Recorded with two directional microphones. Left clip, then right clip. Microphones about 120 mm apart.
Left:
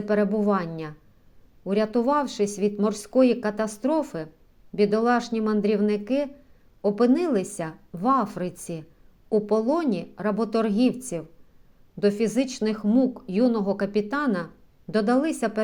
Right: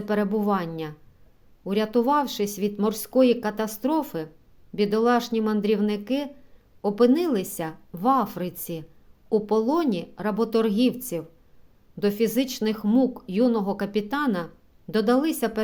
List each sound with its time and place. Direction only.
0.0 s a woman's voice: 25° right (ahead or behind)